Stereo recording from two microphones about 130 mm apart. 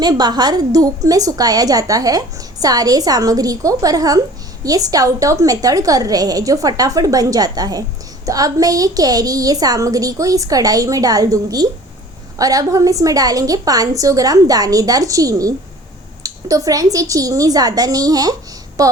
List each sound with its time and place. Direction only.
0.0 s a woman's voice: 30° right (ahead or behind)